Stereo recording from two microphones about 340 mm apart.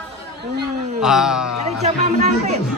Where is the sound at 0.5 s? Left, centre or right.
Right.